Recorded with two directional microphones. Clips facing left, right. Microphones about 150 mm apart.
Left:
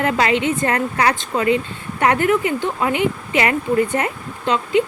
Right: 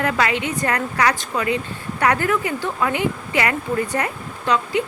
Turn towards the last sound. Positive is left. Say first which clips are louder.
# left 3 dB
turn(degrees=25)  # may be behind; listen again after turning